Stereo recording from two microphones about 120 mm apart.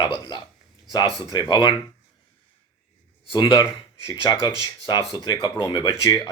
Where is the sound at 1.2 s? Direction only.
40° left (ahead or behind).